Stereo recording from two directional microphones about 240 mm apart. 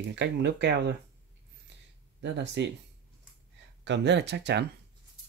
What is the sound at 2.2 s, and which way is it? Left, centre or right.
Speech, right.